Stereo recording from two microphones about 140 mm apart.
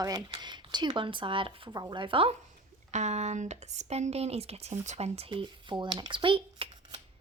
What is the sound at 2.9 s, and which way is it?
Speech, 55° right (ahead or behind).